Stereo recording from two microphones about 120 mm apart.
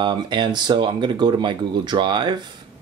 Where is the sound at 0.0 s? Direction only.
40° right (ahead or behind).